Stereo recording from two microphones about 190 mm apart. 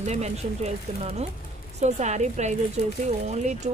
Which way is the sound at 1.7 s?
35° right (ahead or behind).